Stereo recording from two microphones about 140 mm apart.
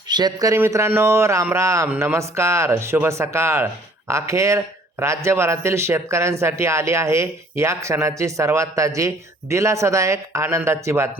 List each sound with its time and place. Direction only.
0.1 s a man's voice: 30° right (ahead or behind)